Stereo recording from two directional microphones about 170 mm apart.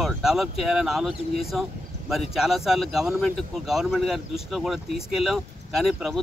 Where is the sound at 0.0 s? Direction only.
Centre (ahead or behind).